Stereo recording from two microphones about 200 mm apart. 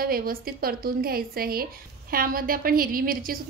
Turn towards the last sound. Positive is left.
turn(degrees=-45)  # may be behind; listen again after turning